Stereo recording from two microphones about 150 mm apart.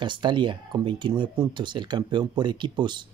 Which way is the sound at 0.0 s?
30° right (ahead or behind).